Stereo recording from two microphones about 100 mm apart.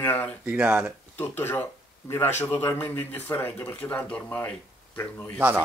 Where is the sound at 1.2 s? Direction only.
20° left (ahead or behind).